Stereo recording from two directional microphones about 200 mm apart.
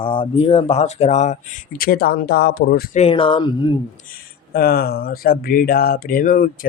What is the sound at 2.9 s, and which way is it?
Speech, 30° left (ahead or behind).